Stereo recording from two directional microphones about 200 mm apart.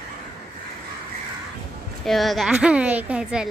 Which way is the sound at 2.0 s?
Centre (ahead or behind).